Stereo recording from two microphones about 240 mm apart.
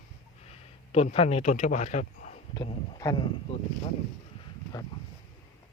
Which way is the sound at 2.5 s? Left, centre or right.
Centre.